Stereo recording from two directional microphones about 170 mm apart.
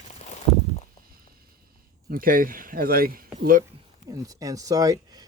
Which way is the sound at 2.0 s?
55° right (ahead or behind).